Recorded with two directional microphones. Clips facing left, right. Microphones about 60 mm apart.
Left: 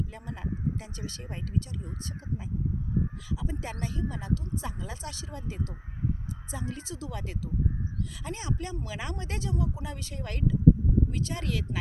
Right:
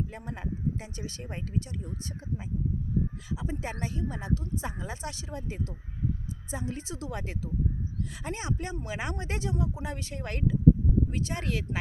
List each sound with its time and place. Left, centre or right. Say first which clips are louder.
0.1 s speech: even; right
3.2 s speech: right 1 dB; right